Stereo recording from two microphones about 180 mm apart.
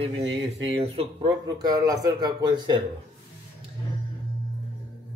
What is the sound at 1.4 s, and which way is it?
Speech, 20° right (ahead or behind).